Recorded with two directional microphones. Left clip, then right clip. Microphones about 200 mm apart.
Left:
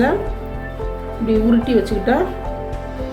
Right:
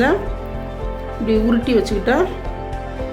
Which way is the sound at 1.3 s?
30° right (ahead or behind).